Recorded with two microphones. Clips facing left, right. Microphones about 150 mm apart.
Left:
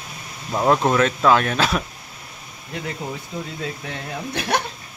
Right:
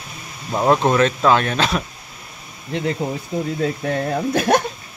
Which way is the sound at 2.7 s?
35° right (ahead or behind).